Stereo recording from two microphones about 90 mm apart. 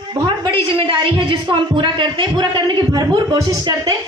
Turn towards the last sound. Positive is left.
turn(degrees=-50)  # may be behind; listen again after turning